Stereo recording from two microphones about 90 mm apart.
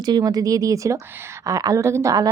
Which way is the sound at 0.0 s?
50° right (ahead or behind).